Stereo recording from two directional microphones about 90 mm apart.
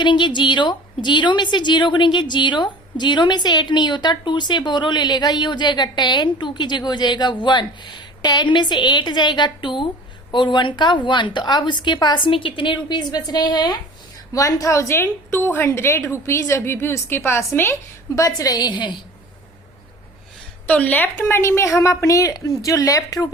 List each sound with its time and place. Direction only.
0.0 s a woman's voice: 60° left (ahead or behind)
14.3 s a woman's voice: 35° left (ahead or behind)
18.1 s a woman's voice: 40° left (ahead or behind)
20.7 s a woman's voice: 15° left (ahead or behind); by 23.3 s 40° left (ahead or behind)